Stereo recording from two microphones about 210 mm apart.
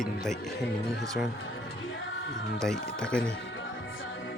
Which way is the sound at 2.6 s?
5° left (ahead or behind).